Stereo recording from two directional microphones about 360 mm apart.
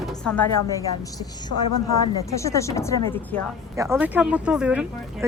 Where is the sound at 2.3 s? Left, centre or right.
Centre.